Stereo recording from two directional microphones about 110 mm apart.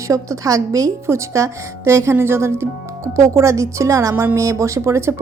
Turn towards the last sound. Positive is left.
turn(degrees=-25)  # may be behind; listen again after turning